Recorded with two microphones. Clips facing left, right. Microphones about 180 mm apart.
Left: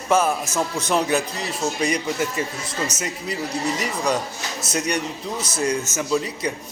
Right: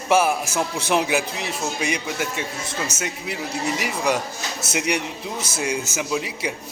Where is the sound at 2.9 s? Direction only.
25° right (ahead or behind).